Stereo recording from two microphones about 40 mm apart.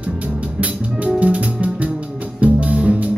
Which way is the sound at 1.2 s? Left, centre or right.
Right.